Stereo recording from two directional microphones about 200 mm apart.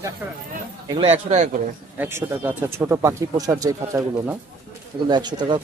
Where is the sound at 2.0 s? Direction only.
10° right (ahead or behind).